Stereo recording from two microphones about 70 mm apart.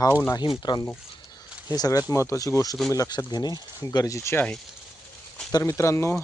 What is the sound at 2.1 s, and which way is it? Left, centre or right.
Speech, left.